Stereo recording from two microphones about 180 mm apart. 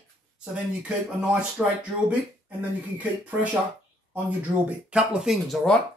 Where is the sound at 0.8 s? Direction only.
5° right (ahead or behind).